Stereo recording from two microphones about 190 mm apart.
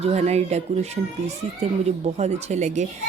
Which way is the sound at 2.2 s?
35° right (ahead or behind).